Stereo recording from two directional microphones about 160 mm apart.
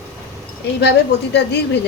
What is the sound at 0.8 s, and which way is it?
A woman's voice, 90° left.